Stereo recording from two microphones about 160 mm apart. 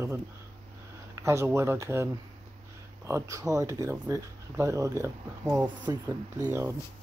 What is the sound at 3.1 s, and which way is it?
Speech, 20° right (ahead or behind).